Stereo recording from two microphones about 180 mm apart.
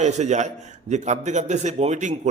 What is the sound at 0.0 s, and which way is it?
A man's voice, 40° right (ahead or behind).